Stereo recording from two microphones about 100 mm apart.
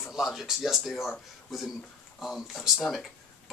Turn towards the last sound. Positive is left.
turn(degrees=0)  # may be behind; listen again after turning